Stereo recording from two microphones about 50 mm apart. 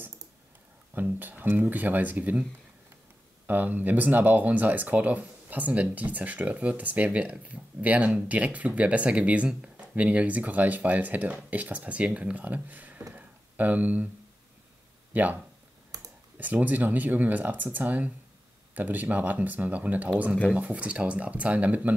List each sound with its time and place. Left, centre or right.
0.9 s speech: right
3.4 s speech: right
15.1 s speech: right
16.3 s speech: right